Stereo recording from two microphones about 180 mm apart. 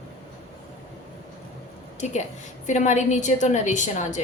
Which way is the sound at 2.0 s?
40° left (ahead or behind).